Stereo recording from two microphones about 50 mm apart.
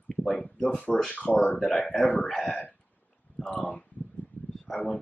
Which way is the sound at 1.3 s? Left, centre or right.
Left.